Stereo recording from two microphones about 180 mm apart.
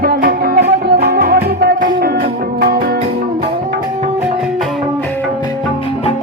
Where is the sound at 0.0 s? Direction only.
55° right (ahead or behind).